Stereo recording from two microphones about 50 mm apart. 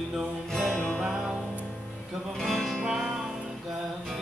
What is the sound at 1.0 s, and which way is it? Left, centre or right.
Music, centre.